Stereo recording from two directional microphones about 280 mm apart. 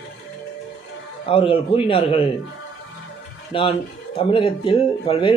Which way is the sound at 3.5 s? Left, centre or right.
Centre.